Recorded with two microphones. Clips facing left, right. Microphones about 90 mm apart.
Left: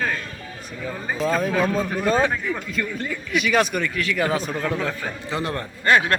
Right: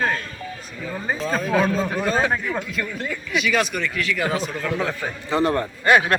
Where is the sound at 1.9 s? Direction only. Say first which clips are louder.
Left 1 dB; 5° right (ahead or behind).